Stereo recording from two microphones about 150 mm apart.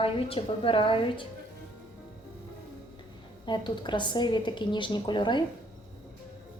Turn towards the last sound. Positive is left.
turn(degrees=30)  # may be behind; listen again after turning